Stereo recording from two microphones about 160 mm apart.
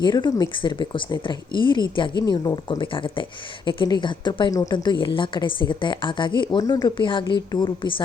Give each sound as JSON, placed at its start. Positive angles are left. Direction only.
{"t": 0.0, "sound": "a woman's voice", "side_deg": 30}